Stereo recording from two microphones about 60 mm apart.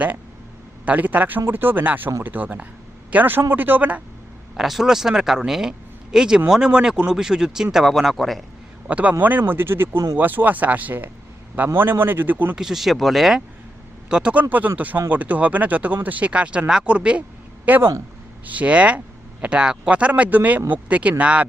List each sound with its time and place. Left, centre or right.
0.9 s speech: right
4.5 s speech: centre
8.9 s speech: right
12.5 s speech: centre
14.1 s speech: centre
14.8 s speech: right
17.7 s speech: right
18.4 s speech: right